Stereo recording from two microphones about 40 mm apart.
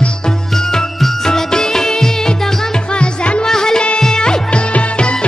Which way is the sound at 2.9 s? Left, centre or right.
Left.